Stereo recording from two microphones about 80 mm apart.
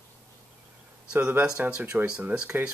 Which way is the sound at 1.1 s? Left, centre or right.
Right.